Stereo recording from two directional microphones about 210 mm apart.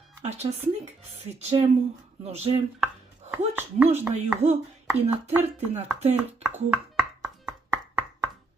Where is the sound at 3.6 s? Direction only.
10° right (ahead or behind).